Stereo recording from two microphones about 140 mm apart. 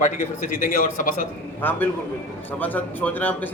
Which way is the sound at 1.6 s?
15° left (ahead or behind).